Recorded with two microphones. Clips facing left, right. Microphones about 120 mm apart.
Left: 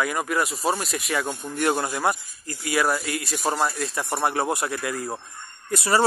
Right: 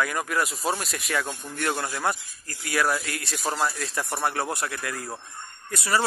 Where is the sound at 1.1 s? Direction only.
15° left (ahead or behind).